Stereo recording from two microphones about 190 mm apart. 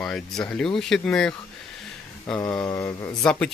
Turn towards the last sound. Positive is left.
turn(degrees=10)  # may be behind; listen again after turning